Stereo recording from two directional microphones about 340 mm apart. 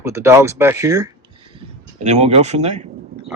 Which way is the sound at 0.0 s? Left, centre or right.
Centre.